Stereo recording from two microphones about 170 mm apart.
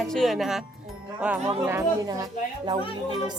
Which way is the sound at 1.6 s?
20° right (ahead or behind).